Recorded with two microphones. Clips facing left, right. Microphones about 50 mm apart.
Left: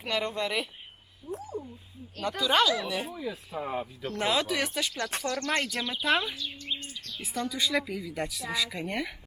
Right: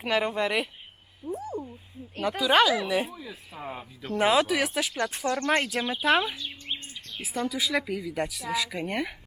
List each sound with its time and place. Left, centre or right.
0.0 s speech: centre
1.4 s speech: right
2.2 s speech: centre
3.1 s a woman's voice: centre
4.1 s speech: centre
5.2 s speech: right
5.6 s speech: centre
6.3 s speech: right
6.7 s bird: right
7.2 s a woman's voice: centre